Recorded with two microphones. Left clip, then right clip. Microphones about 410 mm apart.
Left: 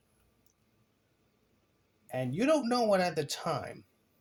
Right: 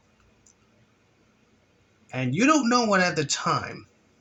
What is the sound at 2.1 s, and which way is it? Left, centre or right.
Speech, left.